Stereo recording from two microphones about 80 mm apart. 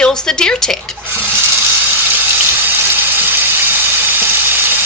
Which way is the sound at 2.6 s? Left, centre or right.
Right.